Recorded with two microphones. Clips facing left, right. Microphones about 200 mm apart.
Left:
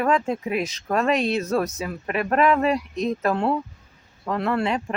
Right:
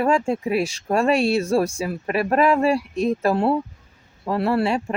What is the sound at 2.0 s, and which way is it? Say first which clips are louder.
Speech: right 3 dB; 30° right (ahead or behind).